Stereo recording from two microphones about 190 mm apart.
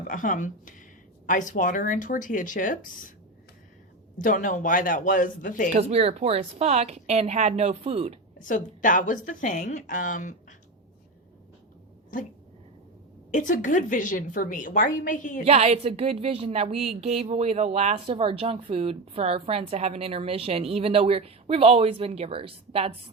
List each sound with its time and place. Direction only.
0.1 s a woman's voice: 45° left (ahead or behind)
4.2 s a woman's voice: 45° left (ahead or behind)
5.7 s speech: 35° right (ahead or behind)
8.4 s a woman's voice: 45° left (ahead or behind)
13.3 s a woman's voice: 40° left (ahead or behind)
15.4 s speech: 35° right (ahead or behind)